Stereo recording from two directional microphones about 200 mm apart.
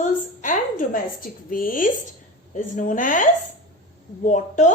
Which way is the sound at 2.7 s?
40° left (ahead or behind).